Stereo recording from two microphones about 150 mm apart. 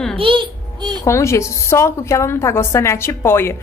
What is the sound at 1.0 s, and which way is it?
A woman's voice, 20° left (ahead or behind).